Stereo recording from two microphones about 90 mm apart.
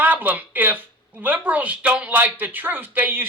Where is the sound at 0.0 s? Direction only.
20° right (ahead or behind).